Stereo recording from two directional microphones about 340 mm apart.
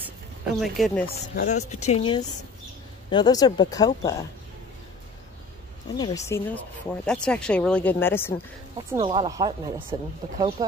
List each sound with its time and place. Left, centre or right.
0.6 s speech: centre
1.0 s speech: left
5.9 s speech: centre
8.7 s speech: centre